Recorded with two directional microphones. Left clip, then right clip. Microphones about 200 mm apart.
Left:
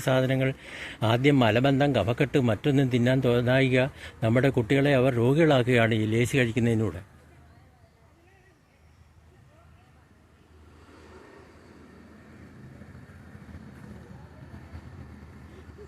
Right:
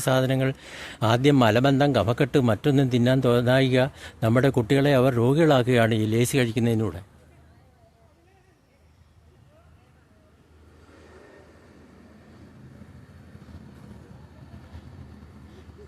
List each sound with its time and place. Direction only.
0.0 s speech: 15° right (ahead or behind)